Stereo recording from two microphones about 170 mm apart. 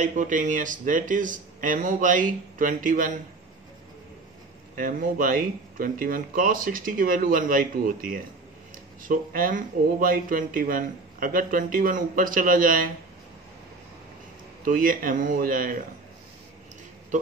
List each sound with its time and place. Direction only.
0.0 s speech: 45° right (ahead or behind)
4.7 s speech: 55° right (ahead or behind)
14.6 s speech: 55° right (ahead or behind)